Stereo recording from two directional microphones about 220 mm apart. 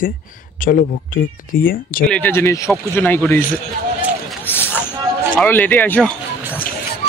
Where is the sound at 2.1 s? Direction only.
10° left (ahead or behind).